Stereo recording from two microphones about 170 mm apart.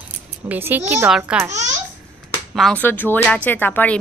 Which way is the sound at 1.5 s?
40° right (ahead or behind).